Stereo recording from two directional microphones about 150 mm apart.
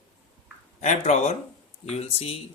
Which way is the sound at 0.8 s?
50° left (ahead or behind).